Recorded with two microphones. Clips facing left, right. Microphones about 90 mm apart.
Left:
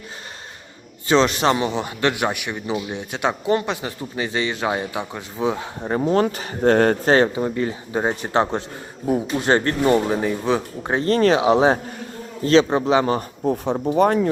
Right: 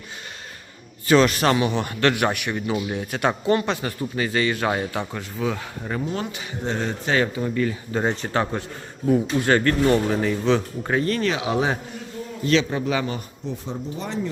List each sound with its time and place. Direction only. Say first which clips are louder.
1.0 s a man's voice: even; 25° left (ahead or behind)
6.0 s speech: left 12 dB; 50° left (ahead or behind)
7.0 s speech: left 6 dB; 40° left (ahead or behind)
7.3 s a man's voice: left 1 dB; 25° left (ahead or behind)
10.9 s speech: left 6 dB; 35° left (ahead or behind)
13.1 s speech: left 9 dB; 50° left (ahead or behind)
13.7 s speech: left 14 dB; 65° left (ahead or behind)